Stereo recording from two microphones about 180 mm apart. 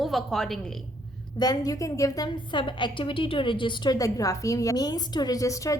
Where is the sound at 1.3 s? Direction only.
20° left (ahead or behind).